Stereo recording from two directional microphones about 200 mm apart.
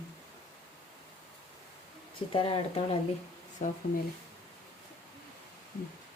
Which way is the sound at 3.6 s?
40° left (ahead or behind).